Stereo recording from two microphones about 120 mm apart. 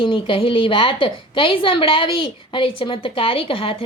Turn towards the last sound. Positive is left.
turn(degrees=50)  # may be behind; listen again after turning